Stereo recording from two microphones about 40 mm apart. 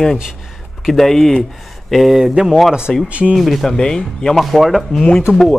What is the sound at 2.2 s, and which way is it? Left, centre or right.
Speech, centre.